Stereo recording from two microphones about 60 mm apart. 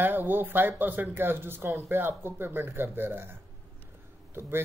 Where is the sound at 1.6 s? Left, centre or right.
Right.